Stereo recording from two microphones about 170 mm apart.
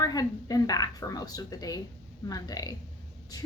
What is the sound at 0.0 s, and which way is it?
A woman's voice, 20° left (ahead or behind).